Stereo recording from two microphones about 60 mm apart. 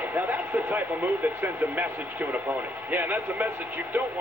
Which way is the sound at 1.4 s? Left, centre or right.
Right.